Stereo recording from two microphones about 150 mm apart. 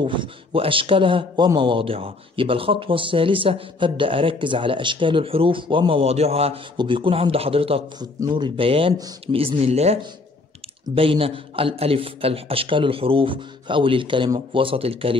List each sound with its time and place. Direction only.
0.0 s a man's voice: 35° right (ahead or behind)
8.0 s a man's voice: 30° right (ahead or behind); by 9.9 s 45° right (ahead or behind)
11.0 s a man's voice: 40° right (ahead or behind)